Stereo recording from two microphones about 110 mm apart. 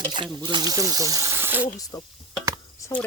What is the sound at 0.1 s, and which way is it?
Speech, 45° right (ahead or behind).